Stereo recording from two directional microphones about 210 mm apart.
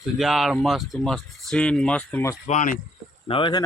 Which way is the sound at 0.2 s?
Centre (ahead or behind).